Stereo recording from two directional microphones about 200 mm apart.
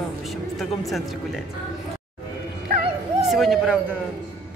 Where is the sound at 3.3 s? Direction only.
Centre (ahead or behind).